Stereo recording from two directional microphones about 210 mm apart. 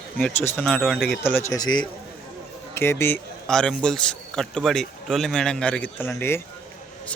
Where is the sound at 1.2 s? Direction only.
10° left (ahead or behind).